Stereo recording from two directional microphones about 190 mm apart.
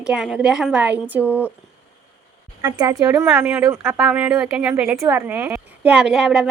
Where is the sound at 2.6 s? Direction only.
20° right (ahead or behind).